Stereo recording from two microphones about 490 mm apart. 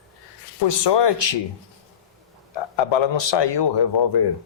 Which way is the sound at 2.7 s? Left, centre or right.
Left.